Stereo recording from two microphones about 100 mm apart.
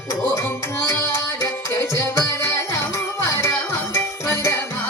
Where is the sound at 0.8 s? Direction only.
30° left (ahead or behind).